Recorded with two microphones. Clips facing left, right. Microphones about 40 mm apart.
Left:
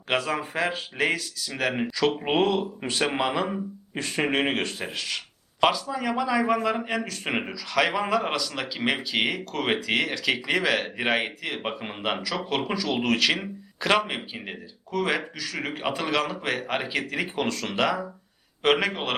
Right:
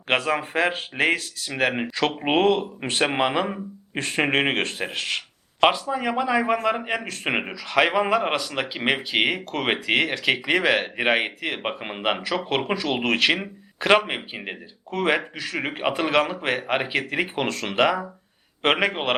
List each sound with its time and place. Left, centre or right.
0.1 s speech: right
3.1 s speech: right
12.5 s speech: right
14.8 s speech: right